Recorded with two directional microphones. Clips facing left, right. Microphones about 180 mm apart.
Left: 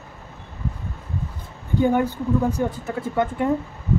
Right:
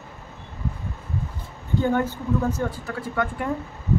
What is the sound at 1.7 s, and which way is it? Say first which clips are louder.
Speech: left 3 dB; 15° left (ahead or behind).